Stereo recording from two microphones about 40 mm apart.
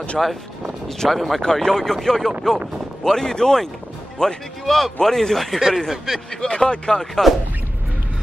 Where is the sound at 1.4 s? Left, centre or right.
Centre.